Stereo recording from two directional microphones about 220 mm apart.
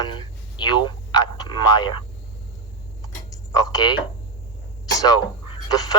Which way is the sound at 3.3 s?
15° left (ahead or behind).